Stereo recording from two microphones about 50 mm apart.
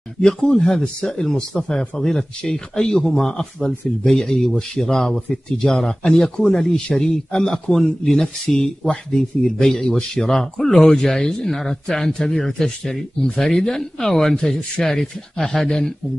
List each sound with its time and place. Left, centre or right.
0.2 s speech: centre